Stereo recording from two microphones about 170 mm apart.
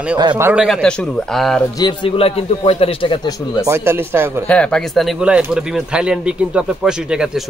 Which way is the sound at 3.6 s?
15° right (ahead or behind).